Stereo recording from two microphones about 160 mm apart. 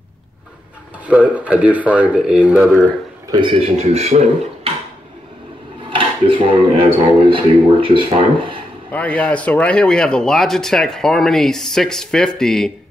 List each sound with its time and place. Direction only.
1.0 s speech: 10° right (ahead or behind)
3.3 s speech: 30° right (ahead or behind)
5.9 s speech: 30° right (ahead or behind)
8.9 s speech: 10° left (ahead or behind)